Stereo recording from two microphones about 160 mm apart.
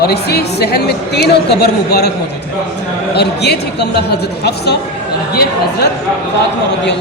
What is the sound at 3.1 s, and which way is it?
A man's voice, 90° left.